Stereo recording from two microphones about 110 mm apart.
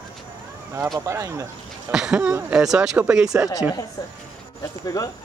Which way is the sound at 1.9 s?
5° right (ahead or behind).